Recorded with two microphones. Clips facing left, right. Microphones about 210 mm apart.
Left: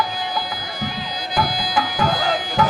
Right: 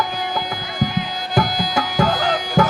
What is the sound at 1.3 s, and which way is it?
Tabla, 45° right (ahead or behind).